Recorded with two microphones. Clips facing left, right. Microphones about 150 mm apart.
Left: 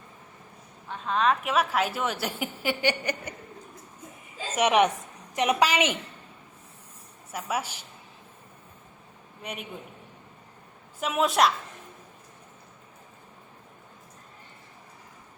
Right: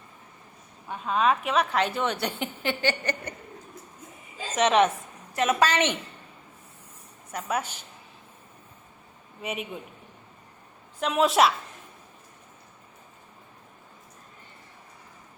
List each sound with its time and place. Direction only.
0.9 s a woman's voice: 5° right (ahead or behind); by 3.3 s 10° left (ahead or behind)
4.5 s a woman's voice: 10° left (ahead or behind)
7.3 s a woman's voice: 5° left (ahead or behind)
9.4 s a woman's voice: 5° right (ahead or behind)
11.0 s a woman's voice: centre (ahead or behind)